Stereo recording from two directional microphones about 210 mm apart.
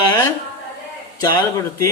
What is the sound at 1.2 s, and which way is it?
Speech, 15° left (ahead or behind).